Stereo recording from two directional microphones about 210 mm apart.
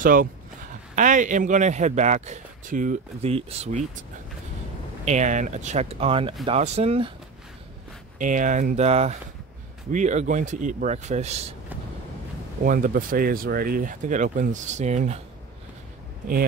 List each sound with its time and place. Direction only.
0.0 s a man's voice: 40° right (ahead or behind)
5.0 s a man's voice: 35° right (ahead or behind)
8.2 s a man's voice: 40° right (ahead or behind)
12.6 s a man's voice: 40° right (ahead or behind)